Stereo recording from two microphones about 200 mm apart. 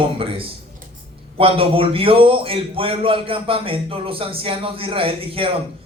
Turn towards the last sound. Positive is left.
turn(degrees=-25)  # may be behind; listen again after turning